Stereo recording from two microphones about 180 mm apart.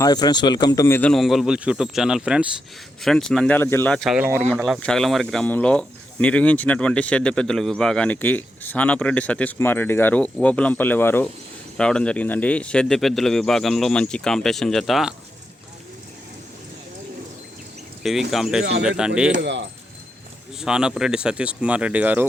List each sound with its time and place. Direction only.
0.0 s speech: 25° left (ahead or behind); by 4.1 s 5° left (ahead or behind)
4.1 s speech: 10° right (ahead or behind)
4.8 s speech: 5° left (ahead or behind)
18.0 s speech: centre (ahead or behind)
19.3 s speech: 80° right
20.6 s speech: 5° right (ahead or behind)